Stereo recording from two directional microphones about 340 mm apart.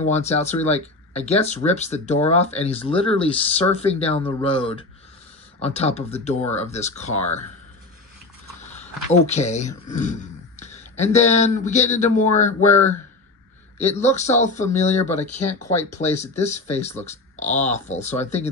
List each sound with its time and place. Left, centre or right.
0.0 s speech: centre
8.6 s speech: centre